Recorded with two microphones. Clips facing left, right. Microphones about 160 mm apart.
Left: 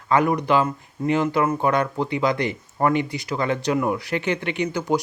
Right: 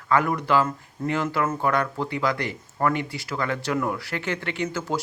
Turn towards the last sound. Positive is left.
turn(degrees=15)  # may be behind; listen again after turning